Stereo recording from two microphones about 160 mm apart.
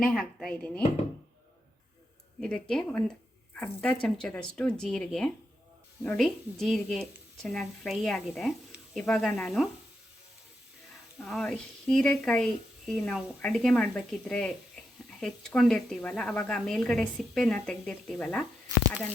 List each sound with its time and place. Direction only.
0.0 s a woman's voice: centre (ahead or behind)
2.4 s a woman's voice: 5° left (ahead or behind)
11.2 s a woman's voice: centre (ahead or behind)